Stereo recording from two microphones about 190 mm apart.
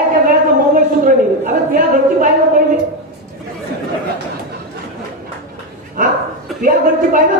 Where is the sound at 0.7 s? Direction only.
45° right (ahead or behind).